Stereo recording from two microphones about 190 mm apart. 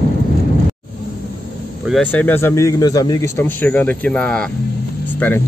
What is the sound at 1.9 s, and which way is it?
A man's voice, 5° left (ahead or behind).